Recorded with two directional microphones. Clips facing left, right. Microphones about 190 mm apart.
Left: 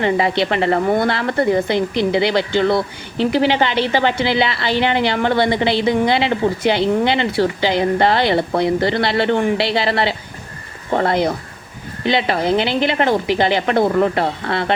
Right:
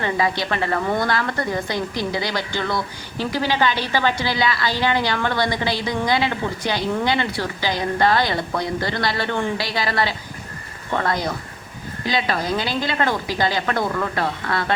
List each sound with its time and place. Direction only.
0.0 s a woman's voice: 25° left (ahead or behind)